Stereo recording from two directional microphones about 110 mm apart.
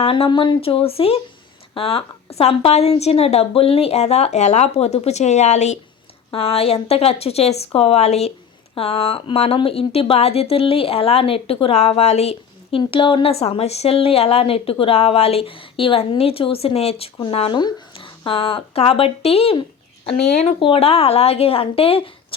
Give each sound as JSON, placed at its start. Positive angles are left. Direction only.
{"t": 0.0, "sound": "a woman's voice", "side_deg": 55}
{"t": 5.0, "sound": "speech", "side_deg": 90}
{"t": 6.3, "sound": "a woman's voice", "side_deg": 60}
{"t": 8.7, "sound": "speech", "side_deg": 60}
{"t": 12.8, "sound": "speech", "side_deg": 50}
{"t": 17.6, "sound": "a sound", "side_deg": 50}
{"t": 18.3, "sound": "speech", "side_deg": 55}
{"t": 20.1, "sound": "speech", "side_deg": 80}
{"t": 20.6, "sound": "speech", "side_deg": 60}